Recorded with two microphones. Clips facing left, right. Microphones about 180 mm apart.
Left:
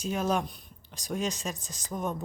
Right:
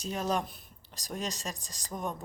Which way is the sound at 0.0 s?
Centre (ahead or behind).